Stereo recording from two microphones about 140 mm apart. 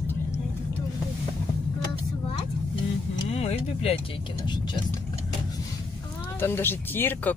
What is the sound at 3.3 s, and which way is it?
Speech, 45° left (ahead or behind).